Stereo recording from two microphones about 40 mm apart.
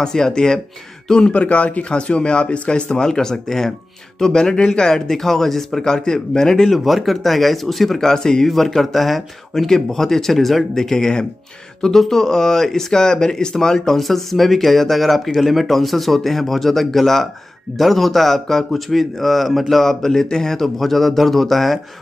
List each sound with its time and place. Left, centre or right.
0.0 s speech: centre
1.3 s speech: left
2.9 s speech: centre
6.8 s speech: centre
8.1 s speech: centre
8.5 s speech: centre
13.7 s speech: centre